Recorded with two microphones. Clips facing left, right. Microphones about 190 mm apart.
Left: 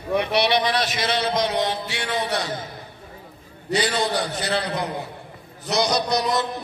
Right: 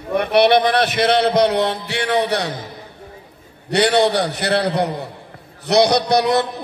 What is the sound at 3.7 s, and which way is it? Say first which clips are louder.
A man's voice: right 7 dB; 65° right (ahead or behind).